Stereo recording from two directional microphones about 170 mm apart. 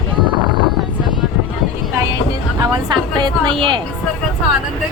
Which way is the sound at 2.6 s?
25° right (ahead or behind).